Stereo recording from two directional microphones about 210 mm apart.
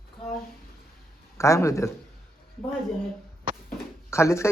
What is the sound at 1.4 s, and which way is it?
Speech, 15° left (ahead or behind).